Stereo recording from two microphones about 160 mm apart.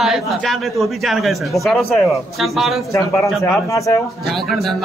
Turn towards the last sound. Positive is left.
turn(degrees=20)  # may be behind; listen again after turning